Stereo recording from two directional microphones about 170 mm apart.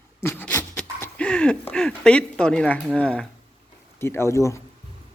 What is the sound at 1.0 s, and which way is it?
A man's voice, 5° left (ahead or behind).